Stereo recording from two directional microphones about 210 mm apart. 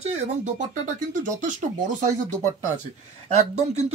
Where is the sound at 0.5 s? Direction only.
35° right (ahead or behind).